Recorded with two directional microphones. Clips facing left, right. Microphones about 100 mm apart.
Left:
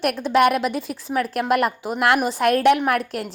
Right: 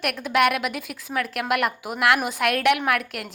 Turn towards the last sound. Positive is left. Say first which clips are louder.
# left 3 dB
turn(degrees=35)  # may be behind; listen again after turning